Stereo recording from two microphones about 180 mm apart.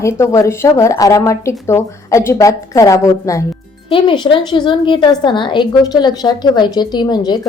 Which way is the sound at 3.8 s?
30° left (ahead or behind).